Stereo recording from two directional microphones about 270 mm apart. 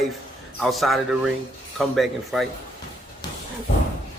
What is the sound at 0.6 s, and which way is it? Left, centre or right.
A man's voice, centre.